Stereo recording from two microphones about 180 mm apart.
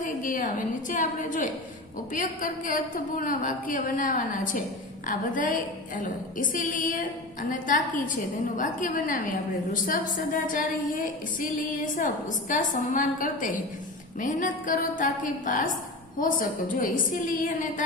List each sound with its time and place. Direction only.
0.0 s a woman's voice: 50° left (ahead or behind)